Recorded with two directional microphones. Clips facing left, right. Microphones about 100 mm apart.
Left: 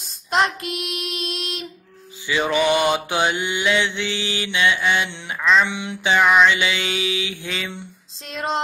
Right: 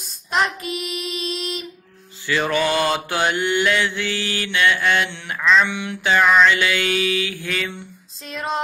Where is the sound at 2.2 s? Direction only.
15° left (ahead or behind).